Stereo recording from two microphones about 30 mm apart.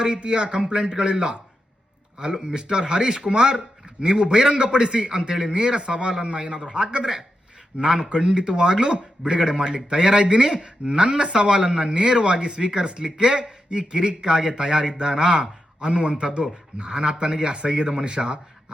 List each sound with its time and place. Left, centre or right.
0.0 s a man's voice: right